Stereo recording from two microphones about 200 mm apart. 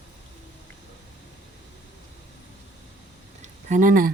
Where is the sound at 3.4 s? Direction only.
40° right (ahead or behind).